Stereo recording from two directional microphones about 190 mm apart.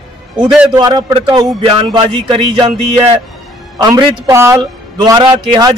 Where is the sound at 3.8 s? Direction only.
20° right (ahead or behind).